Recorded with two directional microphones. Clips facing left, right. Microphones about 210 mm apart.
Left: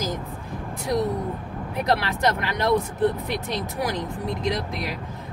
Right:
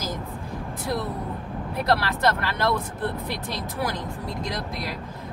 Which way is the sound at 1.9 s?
15° left (ahead or behind).